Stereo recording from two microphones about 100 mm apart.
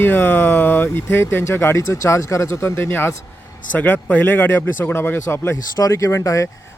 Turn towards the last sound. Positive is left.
turn(degrees=30)  # may be behind; listen again after turning